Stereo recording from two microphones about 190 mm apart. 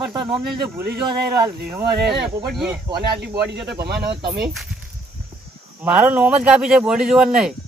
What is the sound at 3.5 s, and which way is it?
Speech, 60° right (ahead or behind).